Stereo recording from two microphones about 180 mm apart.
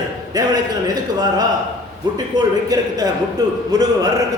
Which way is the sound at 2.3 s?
20° right (ahead or behind).